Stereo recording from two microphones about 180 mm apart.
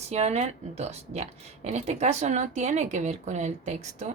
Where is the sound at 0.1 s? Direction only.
40° right (ahead or behind).